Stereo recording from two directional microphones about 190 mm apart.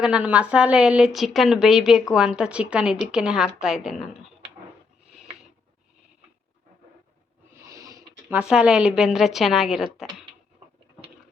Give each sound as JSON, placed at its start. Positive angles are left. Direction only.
{"t": 0.0, "sound": "a woman's voice", "side_deg": -5}
{"t": 7.7, "sound": "a sound", "side_deg": -15}
{"t": 8.4, "sound": "a woman's voice", "side_deg": -5}